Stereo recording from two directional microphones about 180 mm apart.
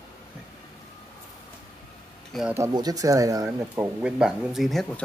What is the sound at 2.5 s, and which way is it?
Speech, 20° right (ahead or behind).